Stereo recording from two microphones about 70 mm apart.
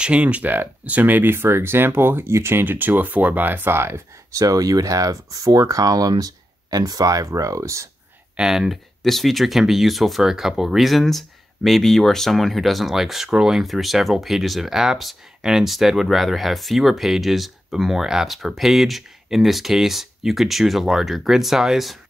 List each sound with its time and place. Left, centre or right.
0.0 s speech: centre; by 4.0 s right
4.3 s speech: right
8.4 s speech: centre